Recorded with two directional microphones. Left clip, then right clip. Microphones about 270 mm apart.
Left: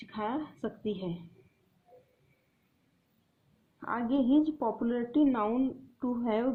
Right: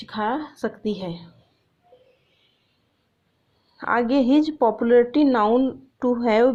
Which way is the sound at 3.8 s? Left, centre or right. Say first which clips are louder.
Right 11 dB; right.